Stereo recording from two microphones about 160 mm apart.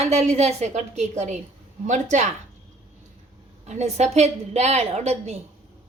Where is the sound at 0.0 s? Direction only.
40° right (ahead or behind).